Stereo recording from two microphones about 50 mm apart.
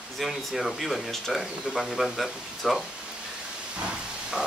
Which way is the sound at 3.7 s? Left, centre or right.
Centre.